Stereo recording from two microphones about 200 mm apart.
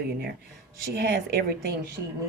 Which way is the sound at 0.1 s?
50° right (ahead or behind).